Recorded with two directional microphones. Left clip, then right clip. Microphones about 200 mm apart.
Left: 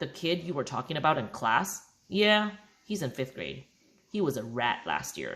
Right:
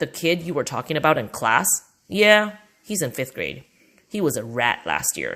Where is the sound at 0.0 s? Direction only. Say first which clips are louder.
Right 9 dB; 35° right (ahead or behind).